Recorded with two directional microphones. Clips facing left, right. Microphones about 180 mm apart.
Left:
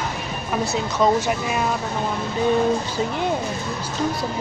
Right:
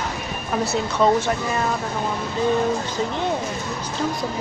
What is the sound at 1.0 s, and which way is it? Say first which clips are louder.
Speech: even; 10° left (ahead or behind).